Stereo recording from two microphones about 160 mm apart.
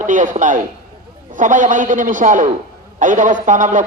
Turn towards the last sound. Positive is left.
turn(degrees=-55)  # may be behind; listen again after turning